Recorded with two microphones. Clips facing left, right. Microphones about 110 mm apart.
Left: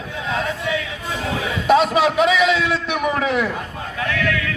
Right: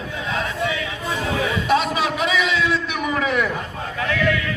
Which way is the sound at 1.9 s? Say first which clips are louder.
Left 6 dB; 75° left (ahead or behind).